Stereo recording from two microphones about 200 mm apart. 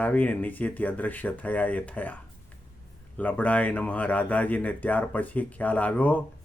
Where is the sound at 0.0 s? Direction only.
10° left (ahead or behind).